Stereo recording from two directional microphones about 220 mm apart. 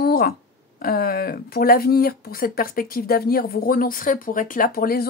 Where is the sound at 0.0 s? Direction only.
45° left (ahead or behind).